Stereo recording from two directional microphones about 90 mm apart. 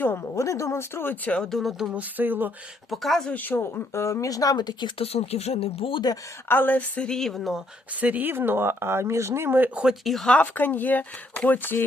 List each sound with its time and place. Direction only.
0.0 s speech: 25° left (ahead or behind)
1.4 s speech: 5° left (ahead or behind)
1.9 s speech: 20° right (ahead or behind)
2.9 s speech: centre (ahead or behind)
3.3 s speech: 20° left (ahead or behind); by 4.9 s 50° left (ahead or behind)
5.5 s speech: 90° left
6.5 s a woman's voice: 20° left (ahead or behind); by 7.6 s centre (ahead or behind)
8.0 s speech: 20° right (ahead or behind)
10.0 s speech: centre (ahead or behind)
10.3 s speech: 20° left (ahead or behind)